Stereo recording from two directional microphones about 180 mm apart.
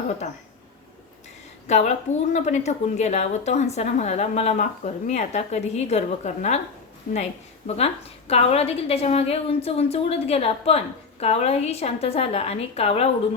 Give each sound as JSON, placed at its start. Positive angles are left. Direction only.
{"t": 1.6, "sound": "a woman's voice", "side_deg": 40}
{"t": 8.3, "sound": "speech", "side_deg": 35}